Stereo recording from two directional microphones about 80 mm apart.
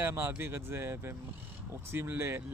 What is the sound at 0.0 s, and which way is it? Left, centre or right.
Speech, right.